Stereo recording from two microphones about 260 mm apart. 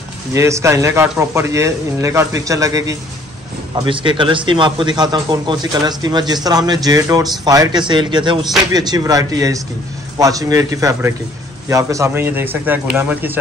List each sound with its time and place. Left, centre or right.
0.3 s a man's voice: centre